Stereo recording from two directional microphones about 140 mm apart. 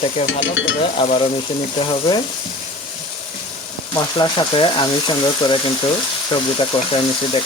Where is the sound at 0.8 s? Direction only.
40° left (ahead or behind).